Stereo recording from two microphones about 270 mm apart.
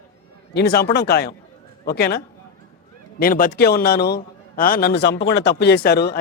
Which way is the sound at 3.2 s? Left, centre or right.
Left.